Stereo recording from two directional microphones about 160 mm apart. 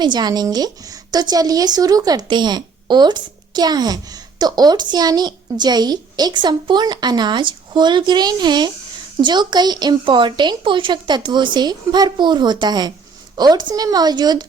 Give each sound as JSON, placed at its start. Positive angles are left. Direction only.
{"t": 0.0, "sound": "a woman's voice", "side_deg": -25}